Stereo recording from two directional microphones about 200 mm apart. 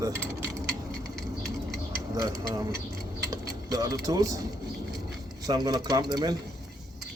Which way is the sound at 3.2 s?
15° right (ahead or behind).